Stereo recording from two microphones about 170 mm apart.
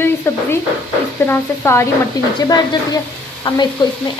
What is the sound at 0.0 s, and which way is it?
A woman's voice, 15° left (ahead or behind).